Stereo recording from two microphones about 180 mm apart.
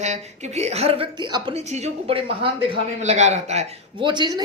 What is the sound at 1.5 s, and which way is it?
Speech, 40° right (ahead or behind).